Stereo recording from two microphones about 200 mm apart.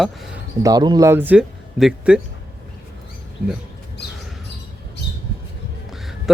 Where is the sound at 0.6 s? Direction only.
20° right (ahead or behind); by 2.2 s centre (ahead or behind).